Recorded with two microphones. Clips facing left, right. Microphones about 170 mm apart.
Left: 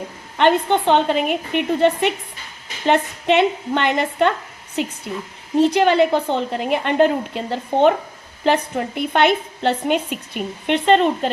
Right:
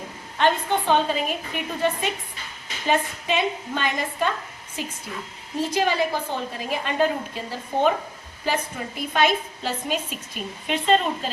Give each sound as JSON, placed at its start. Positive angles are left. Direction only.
{"t": 0.3, "sound": "a woman's voice", "side_deg": 65}